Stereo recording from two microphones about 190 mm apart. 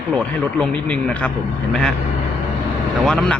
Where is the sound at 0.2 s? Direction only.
5° left (ahead or behind).